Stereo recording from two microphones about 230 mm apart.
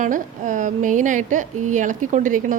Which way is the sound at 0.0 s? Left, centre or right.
Right.